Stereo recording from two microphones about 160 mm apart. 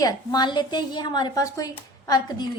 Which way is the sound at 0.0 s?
25° left (ahead or behind).